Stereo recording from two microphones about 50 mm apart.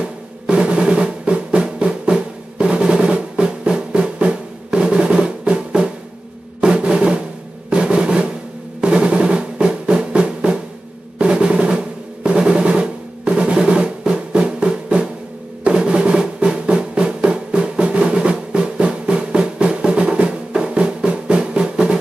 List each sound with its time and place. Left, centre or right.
0.0 s drum: right
11.1 s drum roll: centre
15.6 s drum: right